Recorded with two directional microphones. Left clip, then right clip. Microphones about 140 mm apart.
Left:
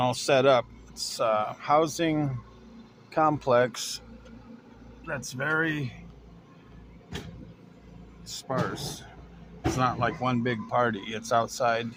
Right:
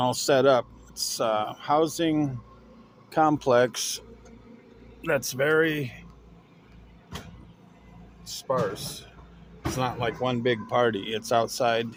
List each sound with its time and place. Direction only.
0.0 s speech: 10° right (ahead or behind)
3.1 s speech: 15° right (ahead or behind)
5.0 s speech: 40° right (ahead or behind); by 5.9 s 15° right (ahead or behind)
9.7 s speech: 5° right (ahead or behind)